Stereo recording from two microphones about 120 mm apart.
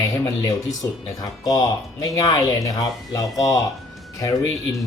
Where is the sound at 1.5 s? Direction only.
30° left (ahead or behind).